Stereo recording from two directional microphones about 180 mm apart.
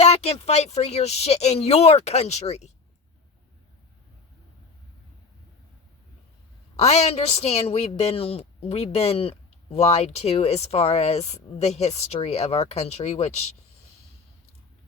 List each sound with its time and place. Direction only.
0.0 s a woman's voice: 35° left (ahead or behind)
6.7 s a woman's voice: 35° left (ahead or behind)